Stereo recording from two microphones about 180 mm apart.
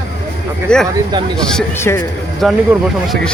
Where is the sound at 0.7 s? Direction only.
5° left (ahead or behind).